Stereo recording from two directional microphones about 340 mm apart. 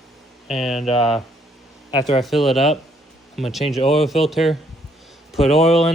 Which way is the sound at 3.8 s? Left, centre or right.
Centre.